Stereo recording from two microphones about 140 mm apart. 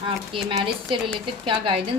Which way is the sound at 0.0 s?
35° right (ahead or behind).